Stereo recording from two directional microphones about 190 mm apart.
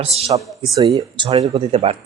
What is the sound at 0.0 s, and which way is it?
Speech, 30° right (ahead or behind).